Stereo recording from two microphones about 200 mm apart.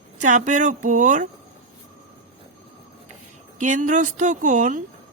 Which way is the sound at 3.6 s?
40° right (ahead or behind).